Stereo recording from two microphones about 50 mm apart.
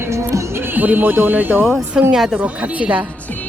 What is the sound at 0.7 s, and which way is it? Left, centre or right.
Speech, right.